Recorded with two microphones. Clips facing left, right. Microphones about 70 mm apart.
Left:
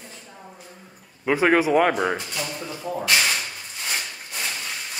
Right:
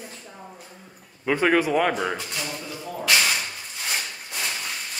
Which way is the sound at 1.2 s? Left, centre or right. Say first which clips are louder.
Left 2 dB; centre.